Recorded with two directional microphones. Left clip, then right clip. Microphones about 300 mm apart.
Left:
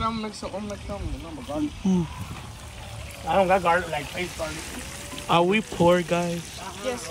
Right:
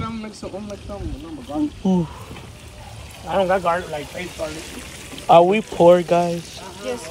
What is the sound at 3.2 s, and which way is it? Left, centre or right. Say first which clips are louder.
Speech: right 1 dB; left.